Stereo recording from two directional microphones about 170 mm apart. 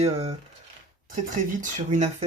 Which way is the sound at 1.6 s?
45° right (ahead or behind).